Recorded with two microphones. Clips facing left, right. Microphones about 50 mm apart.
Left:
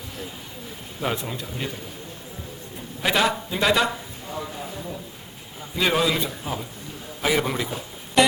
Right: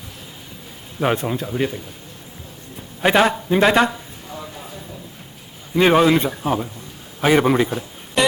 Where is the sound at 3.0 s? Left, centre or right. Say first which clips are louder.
Right 6 dB; right.